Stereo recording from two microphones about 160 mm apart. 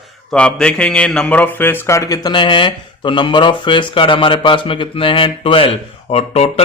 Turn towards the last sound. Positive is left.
turn(degrees=40)  # may be behind; listen again after turning